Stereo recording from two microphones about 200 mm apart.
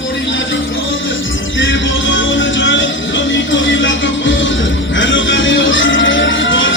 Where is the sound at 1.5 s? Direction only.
70° left (ahead or behind).